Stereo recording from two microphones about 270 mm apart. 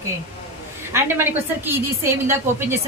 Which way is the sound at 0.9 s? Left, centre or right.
Centre.